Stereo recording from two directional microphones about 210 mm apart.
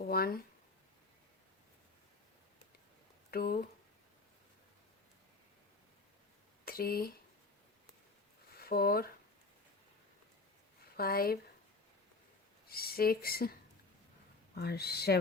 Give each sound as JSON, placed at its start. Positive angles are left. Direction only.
{"t": 0.0, "sound": "a sound", "side_deg": 45}
{"t": 3.3, "sound": "speech", "side_deg": 45}
{"t": 6.7, "sound": "speech", "side_deg": 45}
{"t": 8.5, "sound": "speech", "side_deg": 45}
{"t": 10.9, "sound": "speech", "side_deg": 45}
{"t": 12.6, "sound": "speech", "side_deg": 45}
{"t": 14.5, "sound": "speech", "side_deg": 50}